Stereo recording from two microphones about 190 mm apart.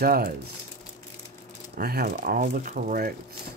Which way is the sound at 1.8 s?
55° right (ahead or behind).